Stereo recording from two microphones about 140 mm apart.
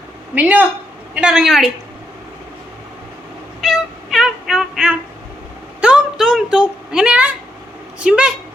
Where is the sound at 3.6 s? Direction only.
Centre (ahead or behind).